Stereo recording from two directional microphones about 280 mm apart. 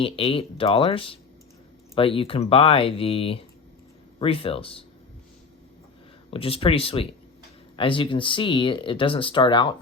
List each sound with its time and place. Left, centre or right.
0.0 s speech: centre
6.3 s speech: centre